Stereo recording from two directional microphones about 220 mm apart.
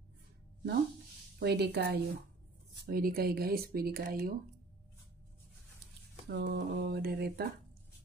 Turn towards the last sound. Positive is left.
turn(degrees=-45)  # may be behind; listen again after turning